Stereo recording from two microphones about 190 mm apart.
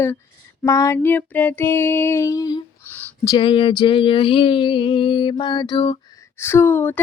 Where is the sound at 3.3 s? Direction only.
25° left (ahead or behind).